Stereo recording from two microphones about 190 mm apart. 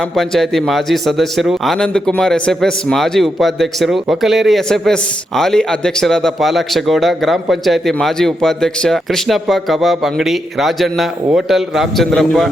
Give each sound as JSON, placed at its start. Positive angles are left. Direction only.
{"t": 0.2, "sound": "a man's voice", "side_deg": 0}